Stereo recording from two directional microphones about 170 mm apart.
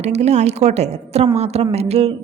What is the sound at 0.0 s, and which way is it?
A woman's voice, 40° right (ahead or behind).